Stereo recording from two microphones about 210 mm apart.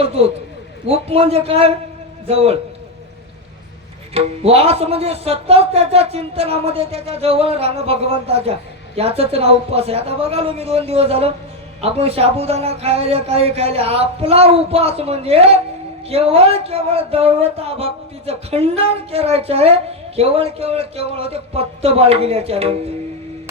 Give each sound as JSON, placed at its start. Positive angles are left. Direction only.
{"t": 0.0, "sound": "speech", "side_deg": -30}
{"t": 4.1, "sound": "speech", "side_deg": -30}